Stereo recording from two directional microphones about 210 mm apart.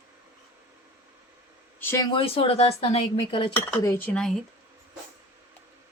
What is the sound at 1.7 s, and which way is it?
Speech, 10° left (ahead or behind).